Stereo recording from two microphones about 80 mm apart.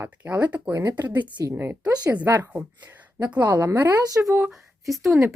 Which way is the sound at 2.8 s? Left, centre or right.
Right.